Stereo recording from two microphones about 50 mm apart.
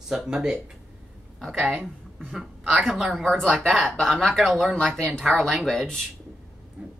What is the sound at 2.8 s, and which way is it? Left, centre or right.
Speech, centre.